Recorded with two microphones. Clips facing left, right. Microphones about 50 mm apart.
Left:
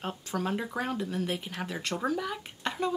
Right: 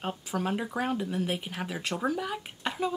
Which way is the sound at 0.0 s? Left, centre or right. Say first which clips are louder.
Right 1 dB; centre.